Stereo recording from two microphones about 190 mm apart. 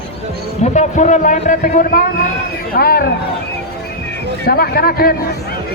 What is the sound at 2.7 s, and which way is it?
Speech, 55° left (ahead or behind).